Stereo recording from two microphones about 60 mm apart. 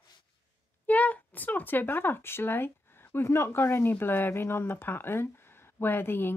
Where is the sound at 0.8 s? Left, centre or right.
Left.